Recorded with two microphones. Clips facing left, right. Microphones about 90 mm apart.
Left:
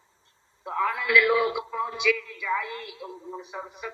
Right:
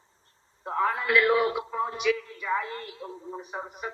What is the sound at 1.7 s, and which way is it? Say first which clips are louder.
A woman's voice: even; 35° right (ahead or behind).